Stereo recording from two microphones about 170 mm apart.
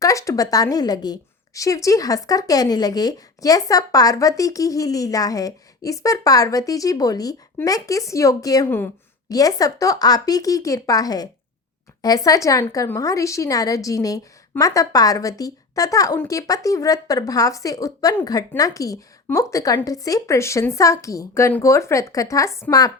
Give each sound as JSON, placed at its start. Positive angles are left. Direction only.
{"t": 0.0, "sound": "a woman's voice", "side_deg": 20}